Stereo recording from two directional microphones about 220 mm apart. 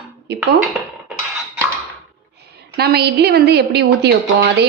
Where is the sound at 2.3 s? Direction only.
50° right (ahead or behind).